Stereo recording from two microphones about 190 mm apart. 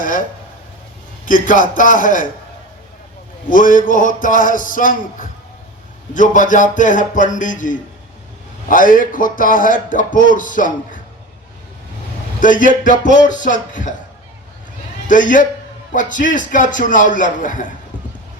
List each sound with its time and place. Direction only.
0.0 s speech: 45° left (ahead or behind)
3.5 s speech: 45° left (ahead or behind)
12.4 s speech: 45° left (ahead or behind)
15.0 s a man's voice: 45° left (ahead or behind)